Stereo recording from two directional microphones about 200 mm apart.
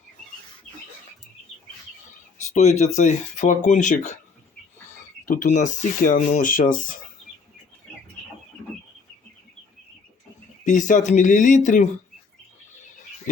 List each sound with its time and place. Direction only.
2.5 s speech: 35° left (ahead or behind)
5.2 s speech: 40° left (ahead or behind)
10.6 s speech: 40° left (ahead or behind)